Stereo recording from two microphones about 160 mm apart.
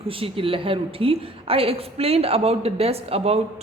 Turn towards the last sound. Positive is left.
turn(degrees=-40)  # may be behind; listen again after turning